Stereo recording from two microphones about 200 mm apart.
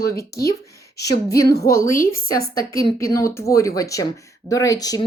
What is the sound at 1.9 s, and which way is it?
Speech, 45° left (ahead or behind).